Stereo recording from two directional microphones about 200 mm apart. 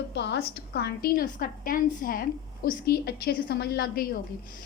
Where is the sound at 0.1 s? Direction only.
60° left (ahead or behind).